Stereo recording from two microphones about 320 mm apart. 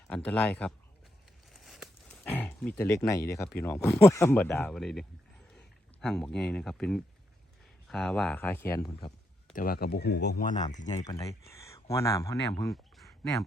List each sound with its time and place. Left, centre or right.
0.1 s speech: centre
1.5 s livestock: centre
3.6 s speech: centre
9.6 s speech: left
10.5 s speech: centre